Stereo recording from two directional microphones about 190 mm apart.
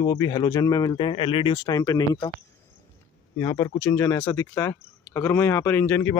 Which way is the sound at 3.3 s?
15° left (ahead or behind).